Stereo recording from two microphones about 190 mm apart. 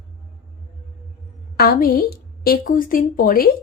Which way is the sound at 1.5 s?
50° left (ahead or behind).